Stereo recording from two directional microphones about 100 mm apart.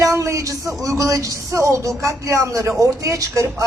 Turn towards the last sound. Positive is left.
turn(degrees=-35)  # may be behind; listen again after turning